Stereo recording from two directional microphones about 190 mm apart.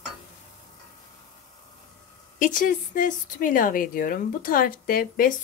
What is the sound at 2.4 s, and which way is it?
Speech, 45° left (ahead or behind).